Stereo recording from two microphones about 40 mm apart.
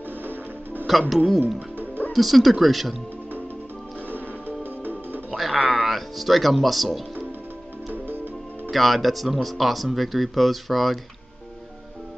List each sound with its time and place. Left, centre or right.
0.2 s music: right
0.8 s speech: centre
4.1 s music: right
5.3 s music: centre
5.7 s speech: centre
8.6 s speech: centre